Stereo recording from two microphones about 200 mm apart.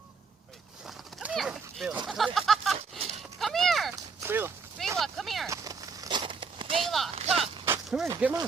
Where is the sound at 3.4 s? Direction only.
Centre (ahead or behind).